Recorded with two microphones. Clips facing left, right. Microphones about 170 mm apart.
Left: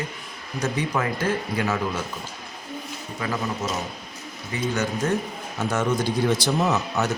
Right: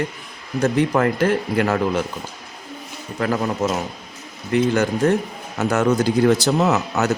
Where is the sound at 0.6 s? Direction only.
55° right (ahead or behind).